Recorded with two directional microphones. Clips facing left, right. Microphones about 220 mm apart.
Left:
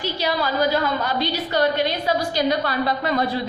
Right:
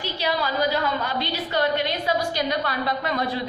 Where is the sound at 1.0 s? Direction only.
40° left (ahead or behind).